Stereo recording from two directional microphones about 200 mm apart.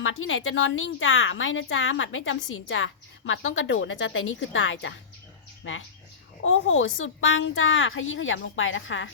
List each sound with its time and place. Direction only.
0.0 s a woman's voice: 75° left (ahead or behind)